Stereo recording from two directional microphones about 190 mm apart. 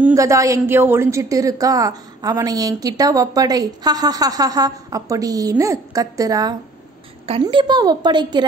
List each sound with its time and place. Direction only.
0.0 s a woman's voice: 15° right (ahead or behind)